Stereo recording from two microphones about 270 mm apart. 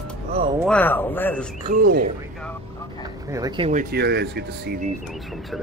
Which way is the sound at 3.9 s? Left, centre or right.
Right.